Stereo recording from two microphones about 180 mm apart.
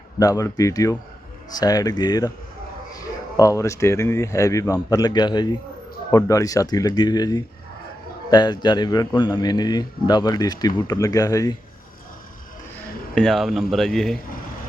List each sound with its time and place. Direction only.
0.2 s a man's voice: 20° left (ahead or behind)
3.3 s a man's voice: 20° left (ahead or behind)
13.1 s a man's voice: centre (ahead or behind)